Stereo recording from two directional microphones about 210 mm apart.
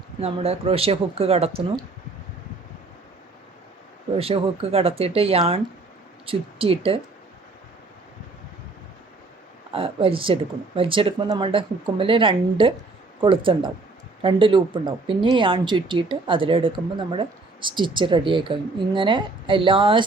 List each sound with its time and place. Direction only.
0.2 s speech: 30° right (ahead or behind)
4.2 s speech: 25° right (ahead or behind)
9.7 s speech: 25° right (ahead or behind)